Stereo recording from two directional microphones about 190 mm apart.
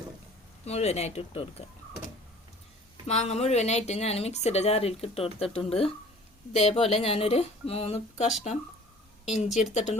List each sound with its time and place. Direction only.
0.6 s speech: 35° left (ahead or behind)
3.1 s speech: 35° left (ahead or behind)
9.5 s speech: centre (ahead or behind)
9.7 s speech: 35° left (ahead or behind)